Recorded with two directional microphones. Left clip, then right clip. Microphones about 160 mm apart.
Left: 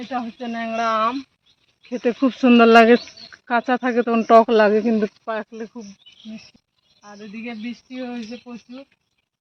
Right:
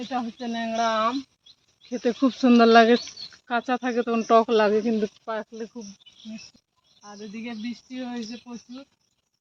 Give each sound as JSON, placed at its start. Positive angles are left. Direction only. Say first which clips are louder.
{"t": 0.1, "sound": "speech", "louder": "left 3 dB", "side_deg": 20}
{"t": 2.5, "sound": "speech", "louder": "left 4 dB", "side_deg": 40}
{"t": 2.9, "sound": "speech", "louder": "left 6 dB", "side_deg": 85}
{"t": 7.0, "sound": "speech", "louder": "left 3 dB", "side_deg": 25}